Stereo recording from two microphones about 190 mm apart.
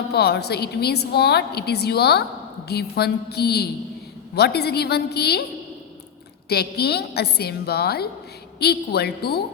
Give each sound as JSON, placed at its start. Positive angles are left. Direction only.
{"t": 0.1, "sound": "a woman's voice", "side_deg": 60}
{"t": 6.5, "sound": "a woman's voice", "side_deg": 55}